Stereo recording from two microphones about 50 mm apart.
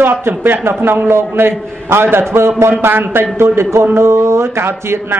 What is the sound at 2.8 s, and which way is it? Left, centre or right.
A man's voice, right.